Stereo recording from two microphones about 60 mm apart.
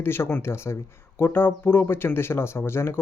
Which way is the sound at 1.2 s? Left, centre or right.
Left.